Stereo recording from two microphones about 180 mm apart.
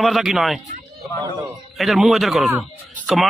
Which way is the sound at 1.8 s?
Centre (ahead or behind).